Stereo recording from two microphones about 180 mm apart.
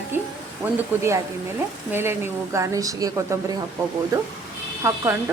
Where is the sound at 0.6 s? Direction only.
10° right (ahead or behind).